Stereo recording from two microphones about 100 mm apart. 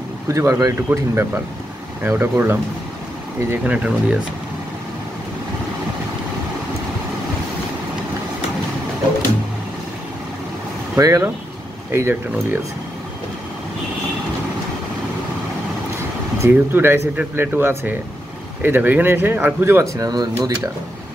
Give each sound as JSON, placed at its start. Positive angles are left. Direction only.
{"t": 0.3, "sound": "speech", "side_deg": -30}
{"t": 0.8, "sound": "speech", "side_deg": -20}
{"t": 3.4, "sound": "speech", "side_deg": -15}
{"t": 11.0, "sound": "speech", "side_deg": -35}
{"t": 16.3, "sound": "speech", "side_deg": -20}